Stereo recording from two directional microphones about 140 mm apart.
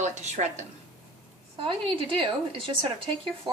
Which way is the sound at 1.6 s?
40° right (ahead or behind).